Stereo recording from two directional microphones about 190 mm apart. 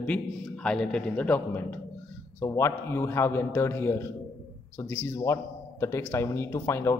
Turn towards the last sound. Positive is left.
turn(degrees=15)  # may be behind; listen again after turning